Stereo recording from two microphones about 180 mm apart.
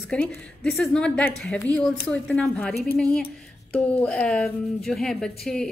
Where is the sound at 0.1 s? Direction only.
Centre (ahead or behind).